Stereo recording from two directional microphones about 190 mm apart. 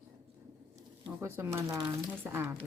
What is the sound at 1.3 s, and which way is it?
Speech, 15° right (ahead or behind).